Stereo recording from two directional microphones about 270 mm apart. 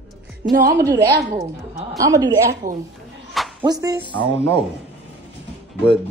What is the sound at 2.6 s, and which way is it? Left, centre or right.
Speech, right.